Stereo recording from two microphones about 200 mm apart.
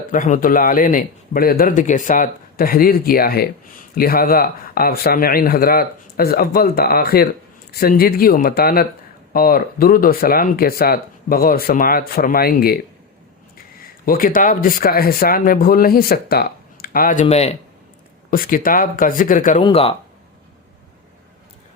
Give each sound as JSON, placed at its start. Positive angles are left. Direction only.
{"t": 0.1, "sound": "speech", "side_deg": 40}
{"t": 13.8, "sound": "speech", "side_deg": 45}
{"t": 18.3, "sound": "speech", "side_deg": 45}
{"t": 19.6, "sound": "speech", "side_deg": 25}